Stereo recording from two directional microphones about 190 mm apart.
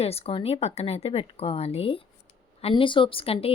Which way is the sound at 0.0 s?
30° left (ahead or behind).